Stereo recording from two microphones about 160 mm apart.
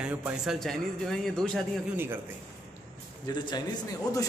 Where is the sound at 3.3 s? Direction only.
25° left (ahead or behind).